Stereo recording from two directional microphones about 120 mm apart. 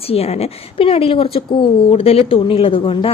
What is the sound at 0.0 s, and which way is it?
A woman's voice, 55° left (ahead or behind).